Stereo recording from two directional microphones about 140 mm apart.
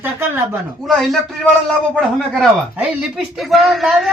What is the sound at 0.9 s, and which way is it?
Speech, centre (ahead or behind).